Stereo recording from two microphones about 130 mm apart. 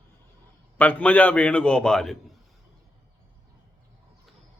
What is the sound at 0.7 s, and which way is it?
A man's voice, 10° left (ahead or behind).